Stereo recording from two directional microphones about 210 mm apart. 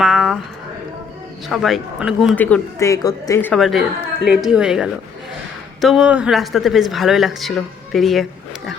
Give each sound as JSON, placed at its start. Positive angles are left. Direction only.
{"t": 0.0, "sound": "a sound", "side_deg": 0}
{"t": 1.5, "sound": "speech", "side_deg": 0}
{"t": 2.3, "sound": "speech", "side_deg": 10}